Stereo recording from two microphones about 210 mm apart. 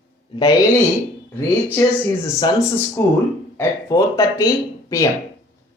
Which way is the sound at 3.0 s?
10° left (ahead or behind).